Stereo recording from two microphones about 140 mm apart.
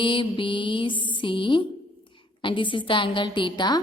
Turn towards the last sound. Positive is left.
turn(degrees=30)  # may be behind; listen again after turning